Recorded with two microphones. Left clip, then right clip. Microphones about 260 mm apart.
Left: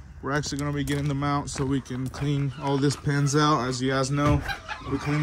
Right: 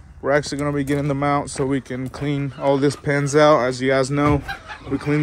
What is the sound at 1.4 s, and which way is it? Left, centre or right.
Speech, centre.